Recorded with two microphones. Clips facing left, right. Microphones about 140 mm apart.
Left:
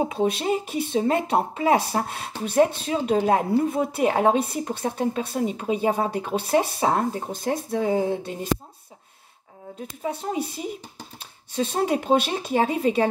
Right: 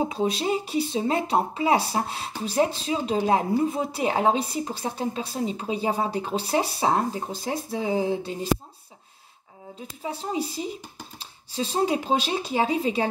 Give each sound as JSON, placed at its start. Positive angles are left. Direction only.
{"t": 0.1, "sound": "a woman's voice", "side_deg": 55}
{"t": 9.8, "sound": "a woman's voice", "side_deg": 50}